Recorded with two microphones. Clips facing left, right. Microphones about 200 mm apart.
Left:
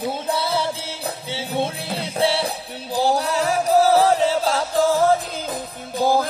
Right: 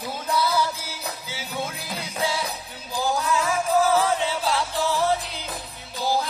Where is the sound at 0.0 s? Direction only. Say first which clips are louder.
Left 2 dB; 30° left (ahead or behind).